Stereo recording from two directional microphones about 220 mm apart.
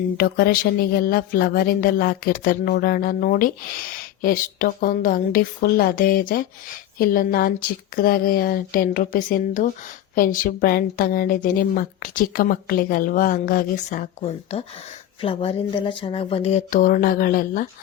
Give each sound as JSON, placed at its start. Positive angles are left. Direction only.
{"t": 0.2, "sound": "speech", "side_deg": 40}